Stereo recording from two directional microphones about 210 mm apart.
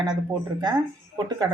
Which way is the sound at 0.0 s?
20° right (ahead or behind).